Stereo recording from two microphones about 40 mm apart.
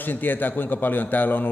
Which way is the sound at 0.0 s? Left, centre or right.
Left.